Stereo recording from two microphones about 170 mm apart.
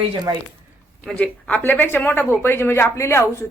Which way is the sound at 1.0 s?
5° left (ahead or behind).